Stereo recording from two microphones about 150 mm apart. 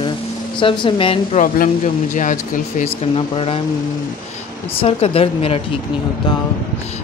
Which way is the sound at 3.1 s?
40° left (ahead or behind).